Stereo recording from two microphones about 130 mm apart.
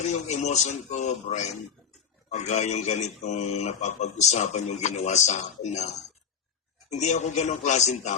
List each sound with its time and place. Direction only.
0.4 s speech: 60° left (ahead or behind)
6.9 s speech: 60° left (ahead or behind)